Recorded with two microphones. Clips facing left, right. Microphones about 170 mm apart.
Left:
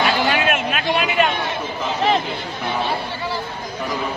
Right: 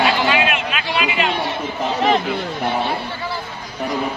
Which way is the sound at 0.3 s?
45° left (ahead or behind).